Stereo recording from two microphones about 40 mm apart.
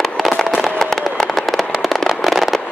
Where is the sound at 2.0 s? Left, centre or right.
Centre.